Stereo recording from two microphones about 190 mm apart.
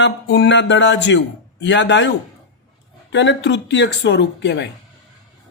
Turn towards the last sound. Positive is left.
turn(degrees=65)  # may be behind; listen again after turning